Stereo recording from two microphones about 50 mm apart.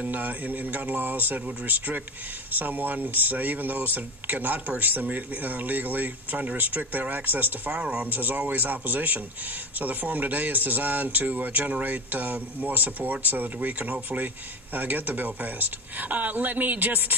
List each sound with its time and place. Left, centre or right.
0.0 s speech: right